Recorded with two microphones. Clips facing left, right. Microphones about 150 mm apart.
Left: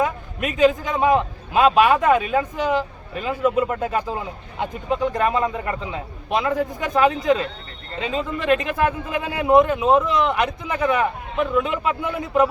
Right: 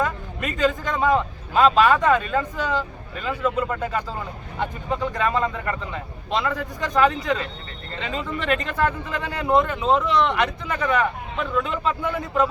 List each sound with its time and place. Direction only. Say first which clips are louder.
0.0 s a man's voice: left 3 dB; 10° left (ahead or behind)